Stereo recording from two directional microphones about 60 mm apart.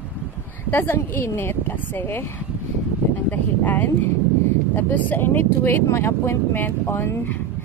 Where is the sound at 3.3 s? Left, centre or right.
Left.